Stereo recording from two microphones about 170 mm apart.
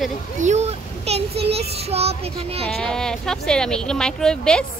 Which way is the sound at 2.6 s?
5° left (ahead or behind).